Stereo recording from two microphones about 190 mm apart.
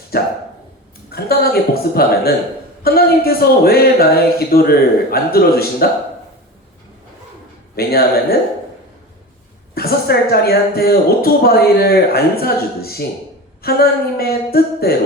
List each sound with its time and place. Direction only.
0.1 s a woman's voice: 55° left (ahead or behind)
7.8 s a woman's voice: 55° left (ahead or behind)
9.7 s a woman's voice: 55° left (ahead or behind)